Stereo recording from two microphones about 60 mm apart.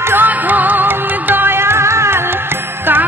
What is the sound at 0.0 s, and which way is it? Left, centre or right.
Music, right.